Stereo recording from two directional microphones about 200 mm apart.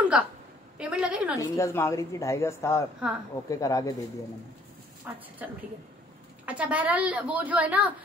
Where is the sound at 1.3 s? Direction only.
15° left (ahead or behind).